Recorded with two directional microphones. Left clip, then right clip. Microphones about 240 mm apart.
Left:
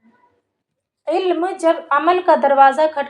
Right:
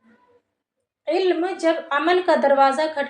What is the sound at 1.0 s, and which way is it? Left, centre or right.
Speech, centre.